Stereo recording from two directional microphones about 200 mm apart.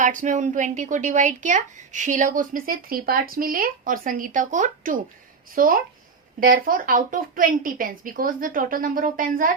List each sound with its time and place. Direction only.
0.0 s a woman's voice: 40° right (ahead or behind)